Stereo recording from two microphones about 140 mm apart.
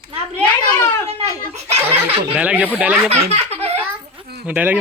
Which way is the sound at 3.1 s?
50° right (ahead or behind).